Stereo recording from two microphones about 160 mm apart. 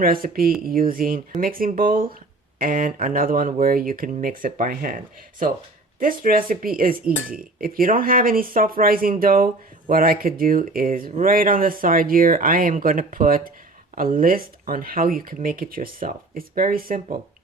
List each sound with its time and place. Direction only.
0.0 s speech: 65° right (ahead or behind)
6.0 s speech: 60° right (ahead or behind)